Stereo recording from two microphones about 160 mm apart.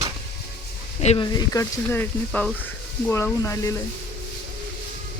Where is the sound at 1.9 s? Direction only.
10° left (ahead or behind).